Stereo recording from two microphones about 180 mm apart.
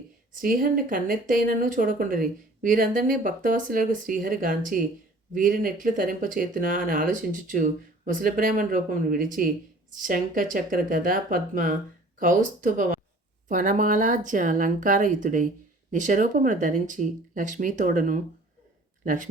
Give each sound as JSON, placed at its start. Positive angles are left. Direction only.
{"t": 0.3, "sound": "speech", "side_deg": -50}